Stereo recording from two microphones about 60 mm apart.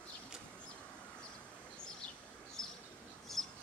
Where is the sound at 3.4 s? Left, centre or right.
Centre.